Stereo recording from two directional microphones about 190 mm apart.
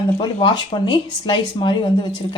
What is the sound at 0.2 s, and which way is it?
Speech, 25° left (ahead or behind).